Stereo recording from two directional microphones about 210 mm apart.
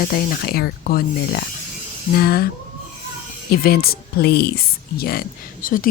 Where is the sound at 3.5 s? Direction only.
45° left (ahead or behind).